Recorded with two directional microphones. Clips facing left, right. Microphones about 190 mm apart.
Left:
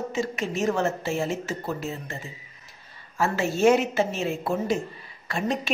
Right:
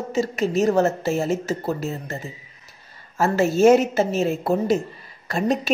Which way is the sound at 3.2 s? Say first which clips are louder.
Right 5 dB; 40° right (ahead or behind).